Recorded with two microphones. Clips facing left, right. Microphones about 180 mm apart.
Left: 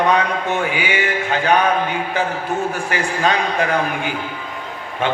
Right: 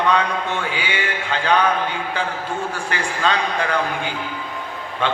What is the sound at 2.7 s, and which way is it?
Speech, 15° left (ahead or behind).